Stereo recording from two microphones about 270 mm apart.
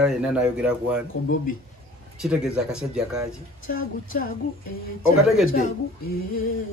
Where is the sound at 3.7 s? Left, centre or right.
Left.